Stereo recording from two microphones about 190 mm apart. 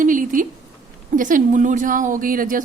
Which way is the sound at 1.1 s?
45° right (ahead or behind).